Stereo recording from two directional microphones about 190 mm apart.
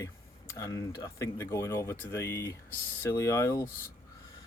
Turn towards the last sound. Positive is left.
turn(degrees=15)  # may be behind; listen again after turning